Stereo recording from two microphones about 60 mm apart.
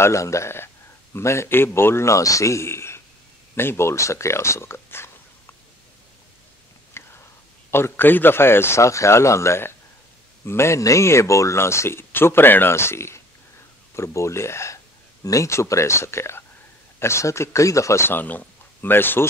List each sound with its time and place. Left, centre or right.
0.0 s speech: left
3.5 s a sound: left
6.9 s whispering: left
7.7 s speech: left
10.8 s speech: left
15.2 s speech: left
15.5 s speech: left
18.0 s speech: left